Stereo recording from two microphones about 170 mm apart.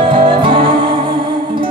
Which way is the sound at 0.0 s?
30° right (ahead or behind).